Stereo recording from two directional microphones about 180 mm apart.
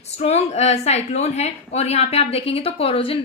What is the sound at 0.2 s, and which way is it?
A woman's voice, 35° left (ahead or behind).